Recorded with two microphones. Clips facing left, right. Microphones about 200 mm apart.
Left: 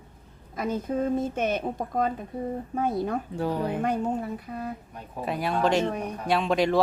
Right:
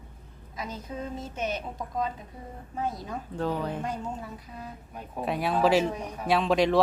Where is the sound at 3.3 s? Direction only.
10° left (ahead or behind).